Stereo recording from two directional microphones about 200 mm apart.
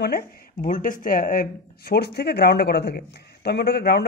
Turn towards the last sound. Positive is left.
turn(degrees=50)  # may be behind; listen again after turning